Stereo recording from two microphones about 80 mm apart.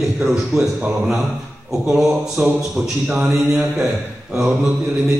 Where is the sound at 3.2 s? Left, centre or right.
Centre.